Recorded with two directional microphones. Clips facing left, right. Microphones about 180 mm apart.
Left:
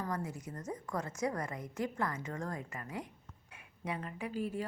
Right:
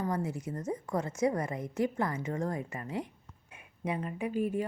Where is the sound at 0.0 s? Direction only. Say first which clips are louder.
Right 6 dB; 25° right (ahead or behind).